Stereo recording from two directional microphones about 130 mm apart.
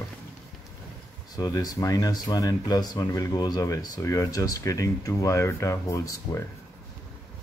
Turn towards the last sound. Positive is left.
turn(degrees=25)  # may be behind; listen again after turning